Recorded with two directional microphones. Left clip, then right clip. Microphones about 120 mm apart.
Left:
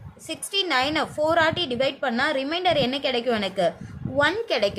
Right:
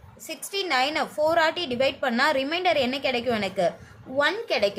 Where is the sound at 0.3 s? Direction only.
20° left (ahead or behind).